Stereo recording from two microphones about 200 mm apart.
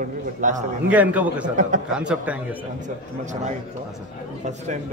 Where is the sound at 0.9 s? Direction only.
5° right (ahead or behind).